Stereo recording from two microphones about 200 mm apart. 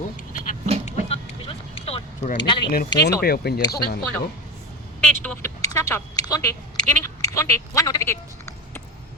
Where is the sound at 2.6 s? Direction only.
45° left (ahead or behind).